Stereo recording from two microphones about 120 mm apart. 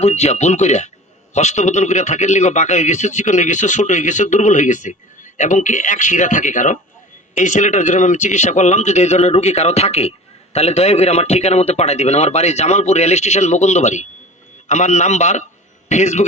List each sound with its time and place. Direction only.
0.0 s a man's voice: 65° left (ahead or behind)